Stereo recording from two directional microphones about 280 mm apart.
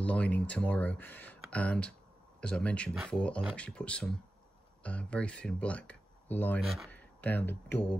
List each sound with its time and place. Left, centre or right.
0.0 s speech: centre